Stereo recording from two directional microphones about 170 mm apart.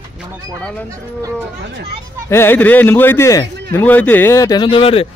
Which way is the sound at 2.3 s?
15° left (ahead or behind).